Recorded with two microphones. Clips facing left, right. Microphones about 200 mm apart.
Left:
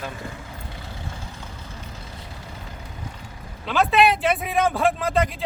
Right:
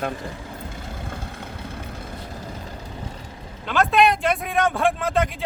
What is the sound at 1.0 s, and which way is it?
Vehicle, 60° right (ahead or behind).